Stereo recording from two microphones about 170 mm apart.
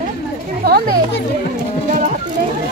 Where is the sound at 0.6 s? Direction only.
65° right (ahead or behind).